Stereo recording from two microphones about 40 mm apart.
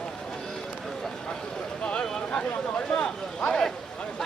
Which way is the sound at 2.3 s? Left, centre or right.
Left.